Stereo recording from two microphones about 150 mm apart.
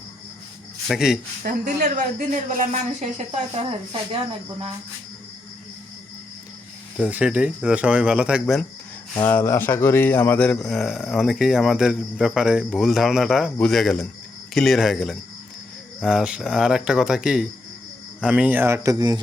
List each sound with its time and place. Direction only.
0.9 s a man's voice: 5° right (ahead or behind)
1.5 s speech: 60° right (ahead or behind)
6.9 s speech: 5° right (ahead or behind)
9.1 s a man's voice: 15° left (ahead or behind); by 19.2 s 25° right (ahead or behind)